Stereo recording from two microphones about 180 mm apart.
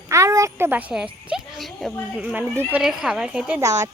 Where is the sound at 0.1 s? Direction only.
15° right (ahead or behind).